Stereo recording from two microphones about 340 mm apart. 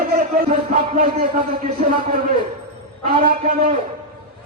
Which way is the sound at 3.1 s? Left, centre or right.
Right.